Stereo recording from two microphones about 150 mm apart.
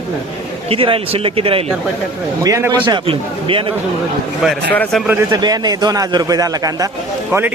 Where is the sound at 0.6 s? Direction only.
35° right (ahead or behind).